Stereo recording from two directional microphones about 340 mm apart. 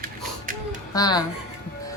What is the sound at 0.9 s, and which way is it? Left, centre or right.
Speech, centre.